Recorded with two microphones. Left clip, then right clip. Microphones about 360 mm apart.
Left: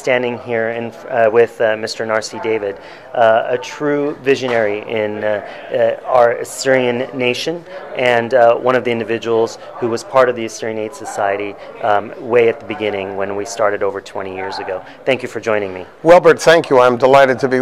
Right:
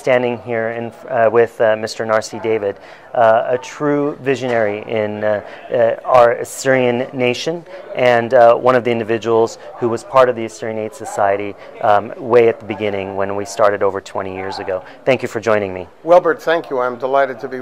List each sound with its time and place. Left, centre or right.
0.0 s speech: right
16.1 s a man's voice: left